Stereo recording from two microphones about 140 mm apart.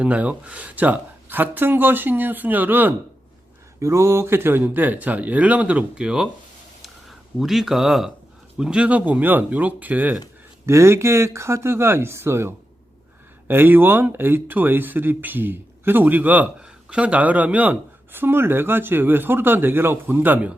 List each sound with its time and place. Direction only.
0.0 s speech: 10° right (ahead or behind)
7.3 s speech: centre (ahead or behind)